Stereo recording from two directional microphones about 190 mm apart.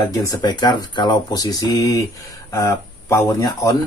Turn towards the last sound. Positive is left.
turn(degrees=15)  # may be behind; listen again after turning